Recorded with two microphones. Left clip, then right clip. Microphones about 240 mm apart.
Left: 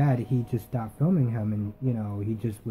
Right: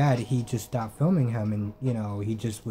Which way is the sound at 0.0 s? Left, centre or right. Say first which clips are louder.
Right 2 dB; centre.